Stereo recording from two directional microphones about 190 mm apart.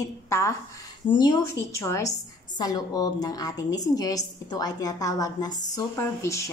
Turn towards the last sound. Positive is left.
turn(degrees=15)  # may be behind; listen again after turning